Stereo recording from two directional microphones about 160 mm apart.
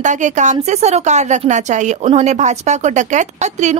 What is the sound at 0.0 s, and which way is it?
A woman's voice, 50° right (ahead or behind).